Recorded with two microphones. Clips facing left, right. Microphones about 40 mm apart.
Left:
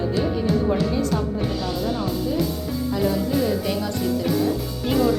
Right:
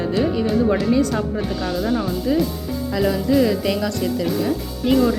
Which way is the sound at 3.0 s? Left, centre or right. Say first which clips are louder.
Right 6 dB; right.